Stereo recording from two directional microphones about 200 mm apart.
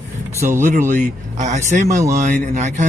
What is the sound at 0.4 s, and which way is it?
Speech, 10° right (ahead or behind).